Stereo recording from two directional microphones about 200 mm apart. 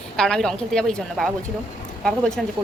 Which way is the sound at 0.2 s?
5° left (ahead or behind).